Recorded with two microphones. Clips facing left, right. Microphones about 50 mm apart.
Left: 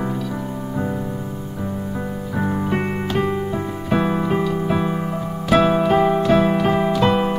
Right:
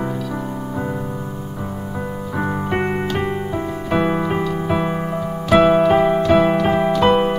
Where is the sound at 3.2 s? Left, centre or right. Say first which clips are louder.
Left 1 dB; right.